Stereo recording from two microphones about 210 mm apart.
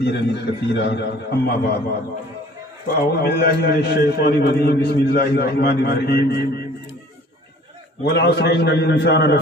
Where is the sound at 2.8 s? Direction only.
45° left (ahead or behind).